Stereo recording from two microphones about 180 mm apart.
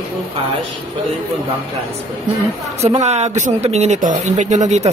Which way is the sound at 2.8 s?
35° right (ahead or behind).